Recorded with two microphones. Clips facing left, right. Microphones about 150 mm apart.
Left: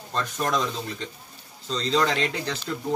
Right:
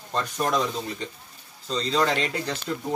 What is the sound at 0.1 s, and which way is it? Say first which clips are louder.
Speech: right 1 dB; 10° right (ahead or behind).